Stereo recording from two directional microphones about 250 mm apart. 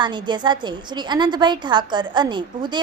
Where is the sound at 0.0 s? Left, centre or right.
Centre.